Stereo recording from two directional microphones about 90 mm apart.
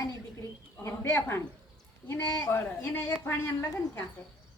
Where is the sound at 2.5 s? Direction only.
25° left (ahead or behind).